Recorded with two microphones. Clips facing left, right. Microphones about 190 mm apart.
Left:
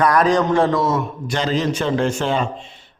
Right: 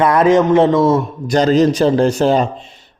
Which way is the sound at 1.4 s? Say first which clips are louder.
Right 9 dB; 40° right (ahead or behind).